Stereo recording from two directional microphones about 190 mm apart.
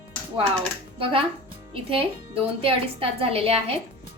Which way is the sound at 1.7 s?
30° right (ahead or behind).